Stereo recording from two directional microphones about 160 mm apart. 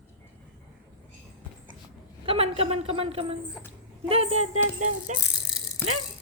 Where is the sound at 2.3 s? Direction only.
40° right (ahead or behind).